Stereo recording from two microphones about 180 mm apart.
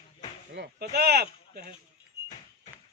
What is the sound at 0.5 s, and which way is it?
Speech, 65° right (ahead or behind).